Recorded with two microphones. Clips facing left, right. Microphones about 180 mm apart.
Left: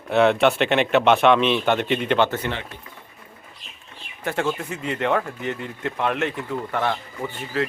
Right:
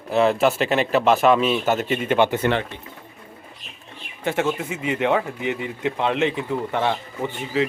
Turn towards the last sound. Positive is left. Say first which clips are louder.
# right 3 dB
turn(degrees=-15)  # may be behind; listen again after turning